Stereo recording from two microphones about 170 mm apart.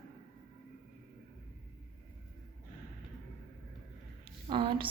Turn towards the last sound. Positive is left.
turn(degrees=-30)  # may be behind; listen again after turning